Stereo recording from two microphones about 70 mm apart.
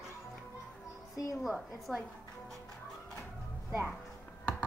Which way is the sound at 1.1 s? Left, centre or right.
Left.